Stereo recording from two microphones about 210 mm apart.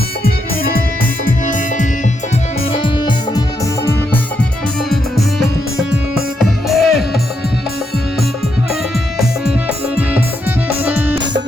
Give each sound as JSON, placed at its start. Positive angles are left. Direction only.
{"t": 1.2, "sound": "music", "side_deg": 40}
{"t": 2.8, "sound": "music", "side_deg": 25}
{"t": 5.9, "sound": "music", "side_deg": 0}
{"t": 9.1, "sound": "music", "side_deg": -5}